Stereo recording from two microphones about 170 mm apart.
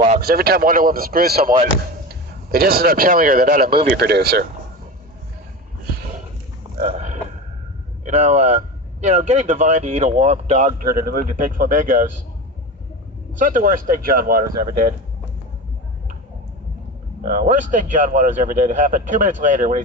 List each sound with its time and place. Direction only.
0.2 s a man's voice: 60° right (ahead or behind)
3.8 s speech: 65° right (ahead or behind)
6.9 s grunt: 45° right (ahead or behind)
8.0 s speech: 45° right (ahead or behind)
10.8 s speech: 60° right (ahead or behind)
13.4 s speech: 55° right (ahead or behind)
17.2 s speech: 50° right (ahead or behind)